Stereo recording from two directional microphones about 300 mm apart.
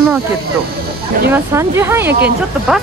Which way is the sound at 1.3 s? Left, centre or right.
Centre.